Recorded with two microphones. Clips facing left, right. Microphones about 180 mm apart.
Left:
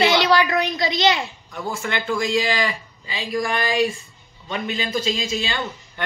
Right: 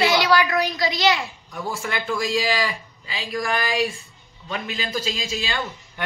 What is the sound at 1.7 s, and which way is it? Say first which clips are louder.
Speech: left 2 dB; centre (ahead or behind).